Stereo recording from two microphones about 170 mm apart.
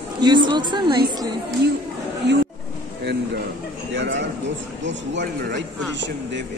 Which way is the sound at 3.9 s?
90° right.